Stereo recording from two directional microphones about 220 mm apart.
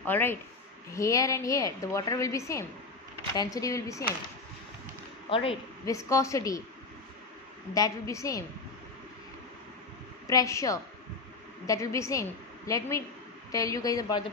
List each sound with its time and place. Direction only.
0.0 s a woman's voice: 10° left (ahead or behind)
5.3 s a woman's voice: 25° left (ahead or behind)
5.9 s a woman's voice: 15° left (ahead or behind)
7.7 s a woman's voice: 15° left (ahead or behind)
10.2 s a woman's voice: 15° left (ahead or behind)